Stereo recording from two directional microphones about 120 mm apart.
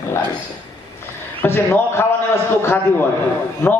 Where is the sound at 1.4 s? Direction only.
20° left (ahead or behind).